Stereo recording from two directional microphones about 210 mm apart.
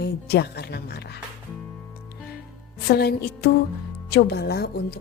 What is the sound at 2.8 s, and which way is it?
A woman's voice, 50° left (ahead or behind).